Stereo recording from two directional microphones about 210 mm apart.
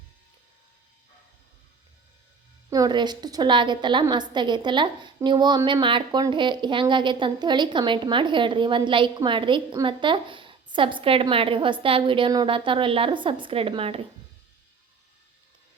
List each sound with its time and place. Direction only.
2.6 s a woman's voice: 15° right (ahead or behind)